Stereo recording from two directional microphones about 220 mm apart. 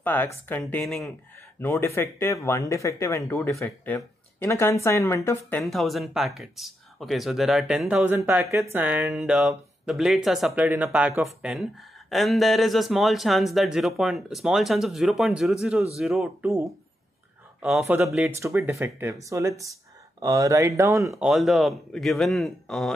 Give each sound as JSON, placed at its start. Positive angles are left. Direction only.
{"t": 0.0, "sound": "speech", "side_deg": 10}
{"t": 1.6, "sound": "speech", "side_deg": 10}
{"t": 5.6, "sound": "speech", "side_deg": 0}
{"t": 21.3, "sound": "speech", "side_deg": 0}